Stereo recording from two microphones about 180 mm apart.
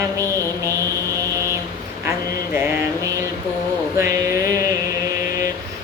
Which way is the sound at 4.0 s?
15° right (ahead or behind).